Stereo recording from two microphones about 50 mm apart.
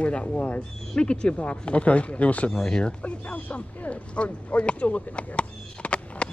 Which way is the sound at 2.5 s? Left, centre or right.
Centre.